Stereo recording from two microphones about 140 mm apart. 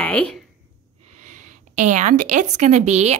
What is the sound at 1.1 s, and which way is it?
A woman's voice, 60° right (ahead or behind).